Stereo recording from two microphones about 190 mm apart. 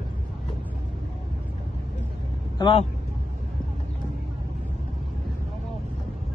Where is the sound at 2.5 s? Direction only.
25° left (ahead or behind).